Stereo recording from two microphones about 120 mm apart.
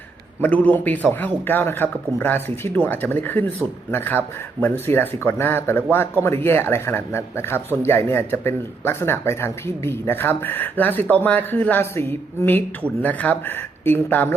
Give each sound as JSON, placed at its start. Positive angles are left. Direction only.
{"t": 0.4, "sound": "speech", "side_deg": 15}